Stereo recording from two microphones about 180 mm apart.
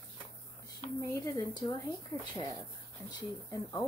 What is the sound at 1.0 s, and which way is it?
Speech, 20° left (ahead or behind).